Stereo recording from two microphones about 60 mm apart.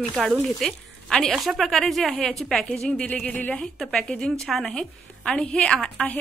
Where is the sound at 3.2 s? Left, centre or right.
Left.